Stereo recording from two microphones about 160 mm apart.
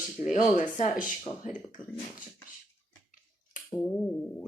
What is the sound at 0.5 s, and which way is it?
Speech, 50° left (ahead or behind).